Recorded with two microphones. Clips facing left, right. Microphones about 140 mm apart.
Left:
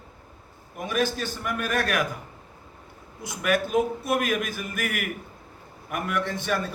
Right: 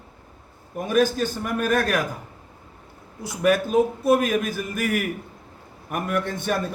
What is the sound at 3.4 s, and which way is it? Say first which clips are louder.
Speech: right 4 dB; 35° right (ahead or behind).